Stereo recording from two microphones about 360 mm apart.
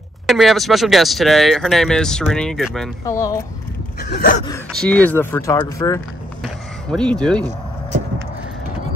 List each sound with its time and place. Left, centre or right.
0.3 s speech: centre
4.0 s gasp: left
4.5 s speech: centre